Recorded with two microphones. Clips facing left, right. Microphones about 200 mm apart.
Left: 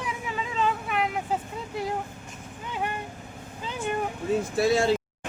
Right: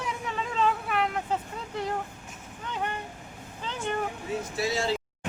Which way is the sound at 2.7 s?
10° left (ahead or behind).